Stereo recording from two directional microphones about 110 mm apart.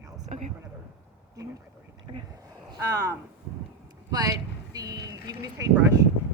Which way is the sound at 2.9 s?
25° right (ahead or behind).